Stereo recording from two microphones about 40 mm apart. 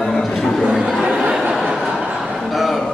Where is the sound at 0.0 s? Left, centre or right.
Centre.